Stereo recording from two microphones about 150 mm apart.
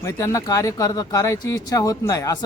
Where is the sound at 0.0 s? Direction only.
20° left (ahead or behind).